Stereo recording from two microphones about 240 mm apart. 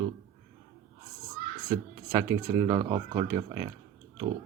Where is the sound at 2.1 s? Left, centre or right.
Centre.